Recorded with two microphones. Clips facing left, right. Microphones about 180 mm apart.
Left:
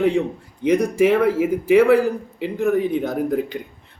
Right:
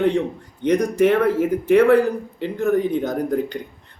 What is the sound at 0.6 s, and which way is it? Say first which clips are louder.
Speech: even; 5° left (ahead or behind).